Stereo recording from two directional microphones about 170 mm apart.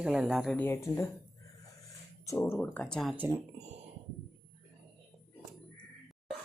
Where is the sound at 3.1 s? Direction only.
10° right (ahead or behind).